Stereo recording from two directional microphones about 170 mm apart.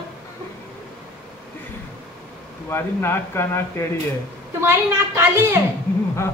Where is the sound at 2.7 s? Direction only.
15° left (ahead or behind).